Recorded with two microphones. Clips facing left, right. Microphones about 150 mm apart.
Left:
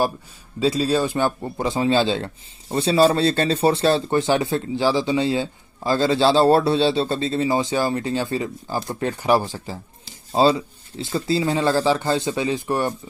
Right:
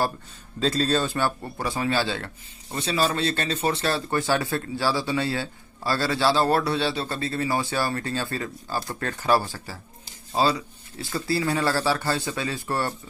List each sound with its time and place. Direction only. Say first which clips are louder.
0.6 s a man's voice: left 4 dB; 10° left (ahead or behind)